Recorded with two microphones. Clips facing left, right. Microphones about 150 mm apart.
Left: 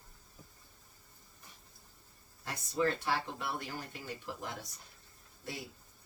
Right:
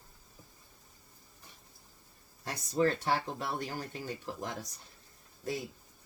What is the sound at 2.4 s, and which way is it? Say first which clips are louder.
Speech: right 4 dB; 35° right (ahead or behind).